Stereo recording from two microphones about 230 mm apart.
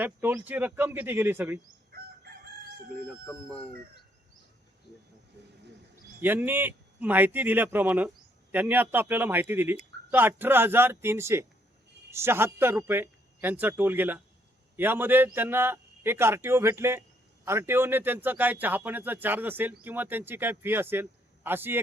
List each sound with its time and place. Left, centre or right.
0.0 s a man's voice: centre
1.9 s chicken: right
3.1 s speech: centre
6.1 s a man's voice: centre